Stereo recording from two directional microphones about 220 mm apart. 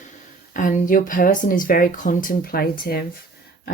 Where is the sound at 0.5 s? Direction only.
35° left (ahead or behind).